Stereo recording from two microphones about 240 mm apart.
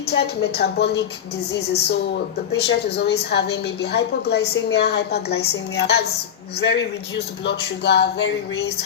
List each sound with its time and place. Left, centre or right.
0.1 s a woman's voice: left